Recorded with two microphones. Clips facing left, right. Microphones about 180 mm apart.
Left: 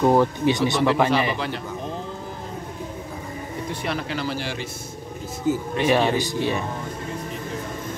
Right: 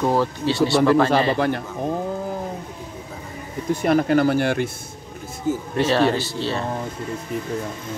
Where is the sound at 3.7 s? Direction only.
45° right (ahead or behind).